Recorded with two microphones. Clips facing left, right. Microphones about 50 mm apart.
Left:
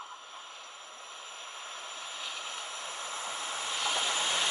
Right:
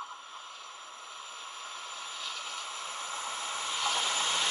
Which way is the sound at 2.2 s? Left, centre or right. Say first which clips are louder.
Even; centre.